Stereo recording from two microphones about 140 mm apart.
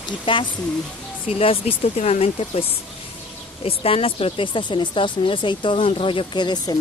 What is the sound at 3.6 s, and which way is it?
Speech, 45° left (ahead or behind).